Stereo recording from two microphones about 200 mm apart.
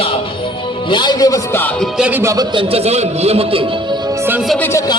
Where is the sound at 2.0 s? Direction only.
10° right (ahead or behind).